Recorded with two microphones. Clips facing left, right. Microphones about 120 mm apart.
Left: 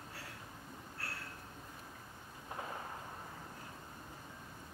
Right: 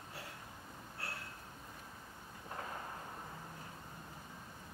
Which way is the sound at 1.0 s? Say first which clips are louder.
Right 1 dB; 20° right (ahead or behind).